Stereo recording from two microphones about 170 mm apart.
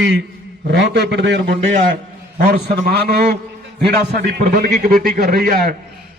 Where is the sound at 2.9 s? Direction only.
65° right (ahead or behind).